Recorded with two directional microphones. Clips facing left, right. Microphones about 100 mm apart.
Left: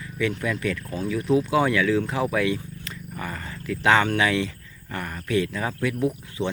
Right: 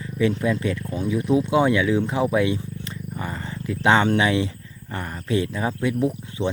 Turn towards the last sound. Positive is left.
turn(degrees=-25)  # may be behind; listen again after turning